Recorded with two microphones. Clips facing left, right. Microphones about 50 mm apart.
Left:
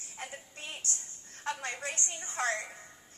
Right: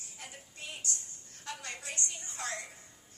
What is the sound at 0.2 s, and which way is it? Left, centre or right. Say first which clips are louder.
A woman's voice: left 5 dB; left.